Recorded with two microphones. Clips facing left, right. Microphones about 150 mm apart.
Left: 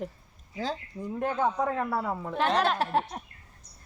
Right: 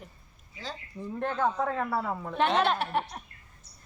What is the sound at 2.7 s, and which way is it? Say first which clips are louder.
Speech: left 3 dB; 40° left (ahead or behind).